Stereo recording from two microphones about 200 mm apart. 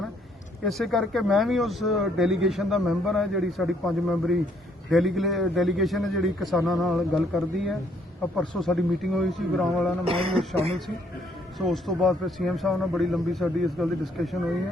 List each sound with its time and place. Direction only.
0.6 s speech: centre (ahead or behind)
4.9 s speech: centre (ahead or behind)
10.0 s speech: 30° right (ahead or behind)
11.5 s speech: centre (ahead or behind)